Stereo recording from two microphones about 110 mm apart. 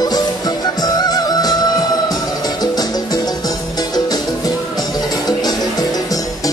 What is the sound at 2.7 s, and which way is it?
Music, 40° left (ahead or behind).